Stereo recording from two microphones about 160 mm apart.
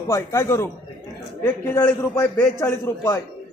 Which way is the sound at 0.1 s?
20° left (ahead or behind).